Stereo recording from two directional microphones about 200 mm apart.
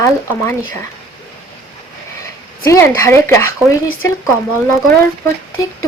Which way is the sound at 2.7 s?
15° left (ahead or behind).